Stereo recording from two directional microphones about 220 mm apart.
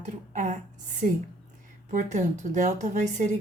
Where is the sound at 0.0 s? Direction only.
35° right (ahead or behind).